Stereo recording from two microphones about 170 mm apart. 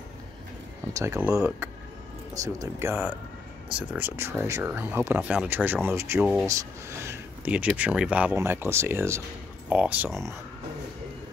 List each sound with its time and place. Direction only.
0.9 s speech: 15° right (ahead or behind)